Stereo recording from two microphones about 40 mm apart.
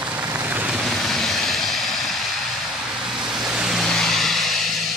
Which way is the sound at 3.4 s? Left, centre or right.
Centre.